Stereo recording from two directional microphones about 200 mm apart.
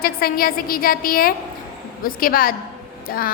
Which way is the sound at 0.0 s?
50° left (ahead or behind).